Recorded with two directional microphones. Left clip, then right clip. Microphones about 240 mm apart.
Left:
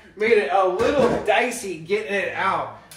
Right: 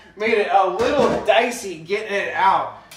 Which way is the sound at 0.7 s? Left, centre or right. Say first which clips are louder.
Right 1 dB; right.